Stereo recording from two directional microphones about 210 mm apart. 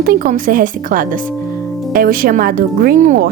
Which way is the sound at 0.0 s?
45° right (ahead or behind).